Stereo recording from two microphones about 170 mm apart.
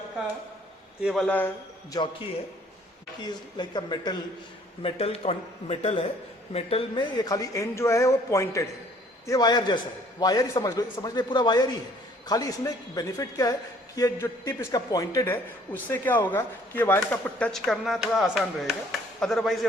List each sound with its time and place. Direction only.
1.0 s speech: 5° left (ahead or behind)
3.6 s a man's voice: 25° left (ahead or behind)
7.2 s a man's voice: 20° left (ahead or behind); by 19.5 s centre (ahead or behind)